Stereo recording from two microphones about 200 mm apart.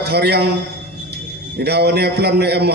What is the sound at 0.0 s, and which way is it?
Speech, 55° right (ahead or behind).